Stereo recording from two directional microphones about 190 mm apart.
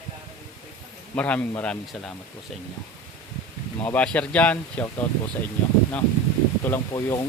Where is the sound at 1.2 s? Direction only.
5° left (ahead or behind).